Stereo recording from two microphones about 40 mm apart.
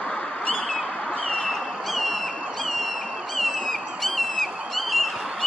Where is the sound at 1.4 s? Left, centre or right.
Centre.